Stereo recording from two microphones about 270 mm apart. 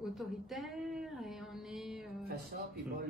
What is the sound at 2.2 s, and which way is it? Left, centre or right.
Speech, right.